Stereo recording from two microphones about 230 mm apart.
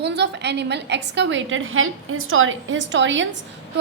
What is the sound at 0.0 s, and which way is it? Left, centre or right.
A woman's voice, right.